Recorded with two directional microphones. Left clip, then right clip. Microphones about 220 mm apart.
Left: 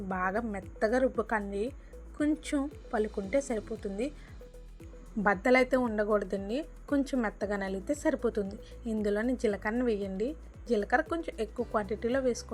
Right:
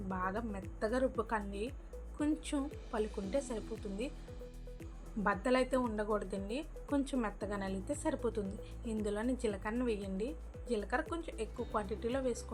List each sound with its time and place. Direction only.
0.1 s a woman's voice: 20° left (ahead or behind)
5.2 s a woman's voice: 25° left (ahead or behind)